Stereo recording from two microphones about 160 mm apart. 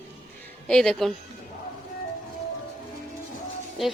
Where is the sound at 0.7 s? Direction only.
5° left (ahead or behind).